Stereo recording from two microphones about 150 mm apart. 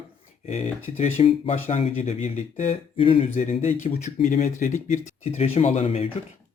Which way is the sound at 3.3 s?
50° left (ahead or behind).